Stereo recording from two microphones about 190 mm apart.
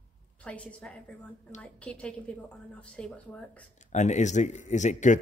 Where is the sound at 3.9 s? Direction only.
40° left (ahead or behind).